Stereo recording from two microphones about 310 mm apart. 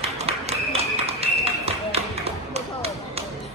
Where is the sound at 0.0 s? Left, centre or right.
Centre.